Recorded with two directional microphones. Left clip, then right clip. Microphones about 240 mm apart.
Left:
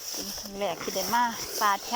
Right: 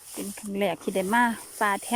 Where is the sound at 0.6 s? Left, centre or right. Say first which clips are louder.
Right 4 dB; right.